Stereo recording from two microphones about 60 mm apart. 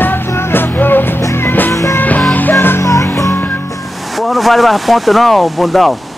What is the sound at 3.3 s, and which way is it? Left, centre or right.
Music, left.